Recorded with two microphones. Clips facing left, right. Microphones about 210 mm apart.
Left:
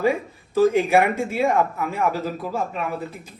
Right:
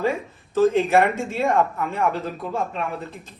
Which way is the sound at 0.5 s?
15° left (ahead or behind).